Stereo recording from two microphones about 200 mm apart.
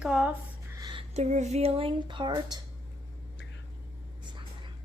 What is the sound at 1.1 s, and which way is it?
A woman's voice, 35° right (ahead or behind).